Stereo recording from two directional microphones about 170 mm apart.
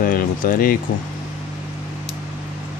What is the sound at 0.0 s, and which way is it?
Speech, 55° left (ahead or behind).